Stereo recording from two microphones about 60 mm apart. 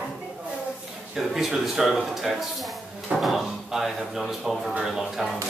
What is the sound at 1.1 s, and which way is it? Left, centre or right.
Speech, centre.